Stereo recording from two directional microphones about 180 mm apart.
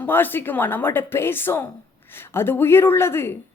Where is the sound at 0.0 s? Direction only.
10° left (ahead or behind).